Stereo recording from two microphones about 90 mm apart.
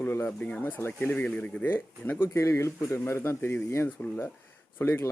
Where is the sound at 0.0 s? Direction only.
25° left (ahead or behind).